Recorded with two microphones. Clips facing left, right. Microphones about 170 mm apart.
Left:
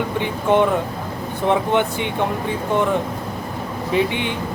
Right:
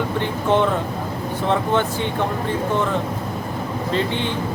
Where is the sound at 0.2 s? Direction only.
15° left (ahead or behind).